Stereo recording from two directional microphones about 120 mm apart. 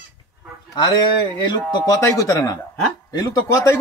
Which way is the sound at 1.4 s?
40° left (ahead or behind).